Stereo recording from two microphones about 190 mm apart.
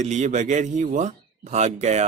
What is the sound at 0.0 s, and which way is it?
Speech, 40° right (ahead or behind).